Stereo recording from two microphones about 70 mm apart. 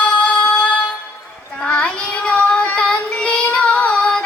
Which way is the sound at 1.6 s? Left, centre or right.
Centre.